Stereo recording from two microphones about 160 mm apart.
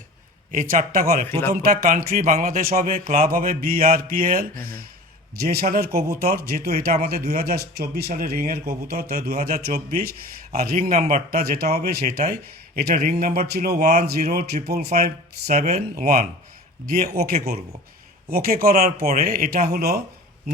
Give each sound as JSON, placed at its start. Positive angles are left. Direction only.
{"t": 0.5, "sound": "music", "side_deg": -60}
{"t": 5.4, "sound": "speech", "side_deg": -75}
{"t": 10.5, "sound": "music", "side_deg": -65}
{"t": 11.3, "sound": "a man's voice", "side_deg": -75}
{"t": 14.2, "sound": "speech", "side_deg": -45}
{"t": 14.5, "sound": "speech", "side_deg": -85}
{"t": 14.8, "sound": "speech", "side_deg": -45}
{"t": 16.0, "sound": "music", "side_deg": -60}
{"t": 17.2, "sound": "speech", "side_deg": -70}